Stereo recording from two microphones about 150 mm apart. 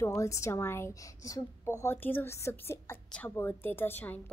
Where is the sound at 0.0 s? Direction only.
20° left (ahead or behind).